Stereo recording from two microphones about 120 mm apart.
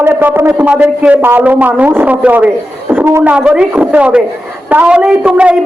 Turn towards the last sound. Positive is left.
turn(degrees=-10)  # may be behind; listen again after turning